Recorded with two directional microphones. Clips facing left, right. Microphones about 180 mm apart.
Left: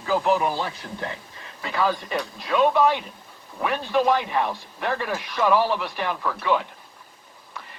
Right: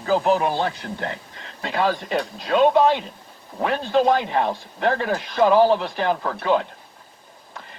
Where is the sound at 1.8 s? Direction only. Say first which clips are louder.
Right 2 dB; 25° right (ahead or behind).